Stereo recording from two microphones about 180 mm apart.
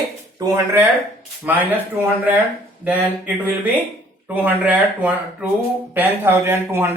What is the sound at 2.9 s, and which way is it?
Speech, 10° right (ahead or behind).